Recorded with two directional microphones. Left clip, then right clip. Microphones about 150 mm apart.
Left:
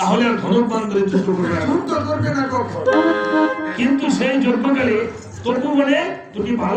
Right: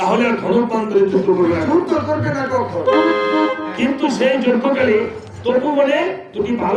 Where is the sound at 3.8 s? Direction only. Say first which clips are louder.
Right 2 dB; 30° right (ahead or behind).